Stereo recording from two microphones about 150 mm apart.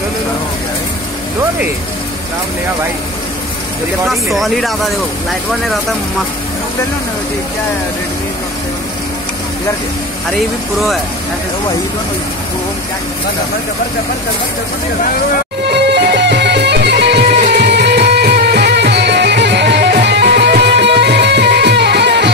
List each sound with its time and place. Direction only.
4.1 s speech: centre (ahead or behind)
15.6 s music: 90° right